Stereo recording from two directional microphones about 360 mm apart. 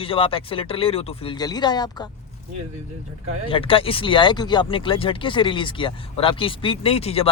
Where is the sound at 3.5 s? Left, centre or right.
Centre.